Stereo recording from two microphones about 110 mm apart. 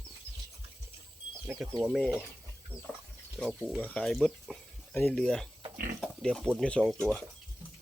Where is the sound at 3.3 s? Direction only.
5° right (ahead or behind).